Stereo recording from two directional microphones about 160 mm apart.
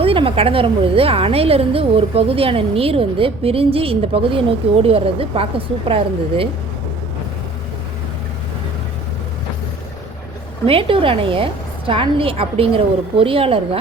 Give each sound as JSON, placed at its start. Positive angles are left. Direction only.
{"t": 0.0, "sound": "a woman's voice", "side_deg": -35}
{"t": 10.7, "sound": "a woman's voice", "side_deg": -35}